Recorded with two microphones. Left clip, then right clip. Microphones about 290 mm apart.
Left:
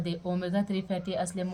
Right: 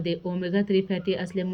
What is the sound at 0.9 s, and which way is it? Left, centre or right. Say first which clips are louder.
Speech: right 5 dB; left.